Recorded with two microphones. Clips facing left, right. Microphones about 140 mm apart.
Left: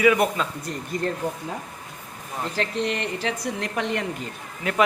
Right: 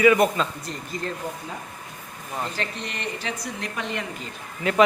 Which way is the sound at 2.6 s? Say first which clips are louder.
Left 6 dB; 90° left.